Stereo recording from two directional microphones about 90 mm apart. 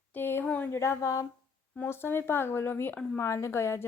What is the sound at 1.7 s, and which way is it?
Speech, 25° left (ahead or behind).